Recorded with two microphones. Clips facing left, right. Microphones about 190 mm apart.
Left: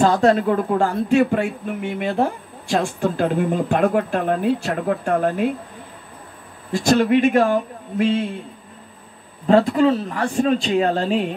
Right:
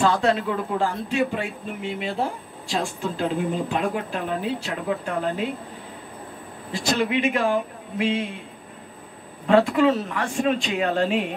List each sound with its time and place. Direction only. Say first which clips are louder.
0.0 s speech: left 5 dB; 45° left (ahead or behind)
6.7 s speech: left 7 dB; 50° left (ahead or behind)
9.5 s speech: left 3 dB; 35° left (ahead or behind)